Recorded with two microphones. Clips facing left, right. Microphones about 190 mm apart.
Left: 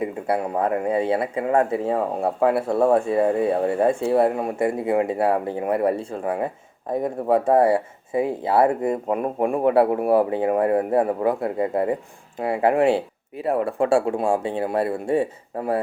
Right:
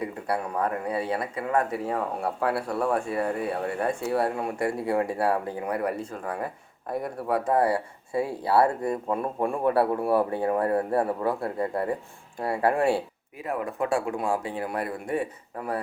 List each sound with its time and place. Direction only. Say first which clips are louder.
0.0 s speech: left 6 dB; 25° left (ahead or behind)
13.4 s speech: left 7 dB; 35° left (ahead or behind)